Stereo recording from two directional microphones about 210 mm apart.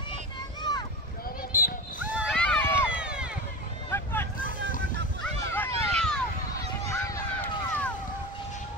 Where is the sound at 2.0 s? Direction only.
5° right (ahead or behind).